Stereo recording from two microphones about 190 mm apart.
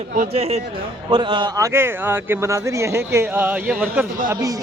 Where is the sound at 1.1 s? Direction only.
25° right (ahead or behind).